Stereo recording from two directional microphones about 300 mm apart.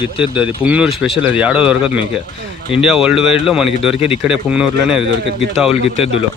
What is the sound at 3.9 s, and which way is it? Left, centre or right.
Speech, centre.